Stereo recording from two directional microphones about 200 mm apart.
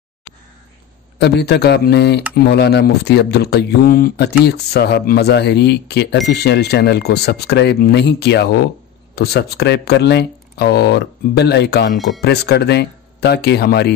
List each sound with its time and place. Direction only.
1.1 s speech: 55° left (ahead or behind)